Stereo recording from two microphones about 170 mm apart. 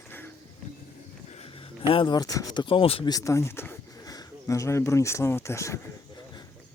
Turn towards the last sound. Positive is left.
turn(degrees=15)  # may be behind; listen again after turning